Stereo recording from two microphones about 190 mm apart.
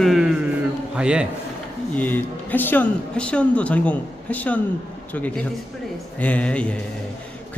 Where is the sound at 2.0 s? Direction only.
10° left (ahead or behind).